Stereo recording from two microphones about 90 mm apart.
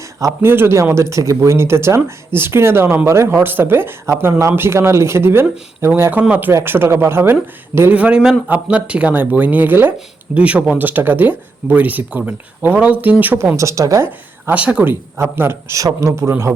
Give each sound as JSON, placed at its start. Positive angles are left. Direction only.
{"t": 0.4, "sound": "speech", "side_deg": -25}
{"t": 7.8, "sound": "speech", "side_deg": -15}
{"t": 14.5, "sound": "speech", "side_deg": -15}
{"t": 15.2, "sound": "a man's voice", "side_deg": -25}